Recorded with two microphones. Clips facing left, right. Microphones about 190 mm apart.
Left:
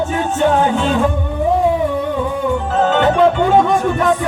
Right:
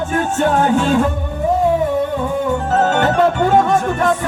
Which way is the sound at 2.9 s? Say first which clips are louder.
Left 2 dB; 45° right (ahead or behind).